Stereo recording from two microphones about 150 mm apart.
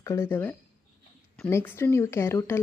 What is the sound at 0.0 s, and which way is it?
Speech, 20° left (ahead or behind).